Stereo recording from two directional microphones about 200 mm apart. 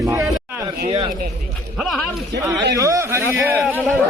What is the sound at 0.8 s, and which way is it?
Speech, 30° right (ahead or behind).